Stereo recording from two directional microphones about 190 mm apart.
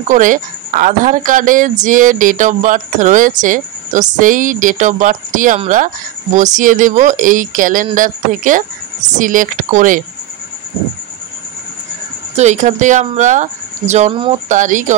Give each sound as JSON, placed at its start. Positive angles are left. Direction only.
{"t": 0.1, "sound": "a woman's voice", "side_deg": -45}
{"t": 12.4, "sound": "speech", "side_deg": -40}